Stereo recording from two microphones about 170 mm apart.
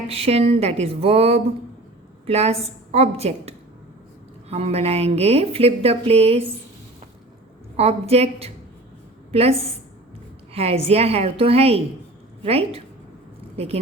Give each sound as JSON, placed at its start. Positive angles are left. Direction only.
{"t": 0.1, "sound": "speech", "side_deg": -35}
{"t": 7.8, "sound": "a woman's voice", "side_deg": -35}